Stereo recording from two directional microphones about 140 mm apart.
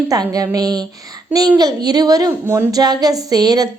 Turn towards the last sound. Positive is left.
turn(degrees=-30)  # may be behind; listen again after turning